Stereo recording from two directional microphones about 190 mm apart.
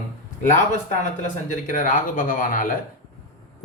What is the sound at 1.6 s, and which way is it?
A man's voice, 45° left (ahead or behind).